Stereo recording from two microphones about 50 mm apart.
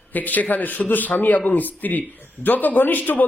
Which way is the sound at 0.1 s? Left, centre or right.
Left.